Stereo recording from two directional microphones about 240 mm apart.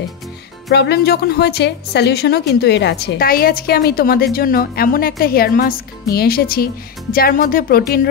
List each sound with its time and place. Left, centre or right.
0.7 s a woman's voice: left